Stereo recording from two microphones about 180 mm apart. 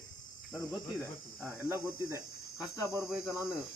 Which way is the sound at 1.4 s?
15° right (ahead or behind).